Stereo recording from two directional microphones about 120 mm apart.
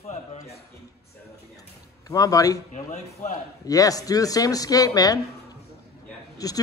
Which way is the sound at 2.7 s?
80° left.